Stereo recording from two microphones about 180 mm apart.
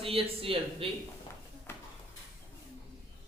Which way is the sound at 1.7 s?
15° left (ahead or behind).